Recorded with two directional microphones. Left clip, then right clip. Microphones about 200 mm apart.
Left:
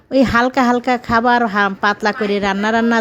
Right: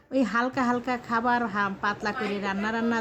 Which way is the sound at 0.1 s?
40° left (ahead or behind).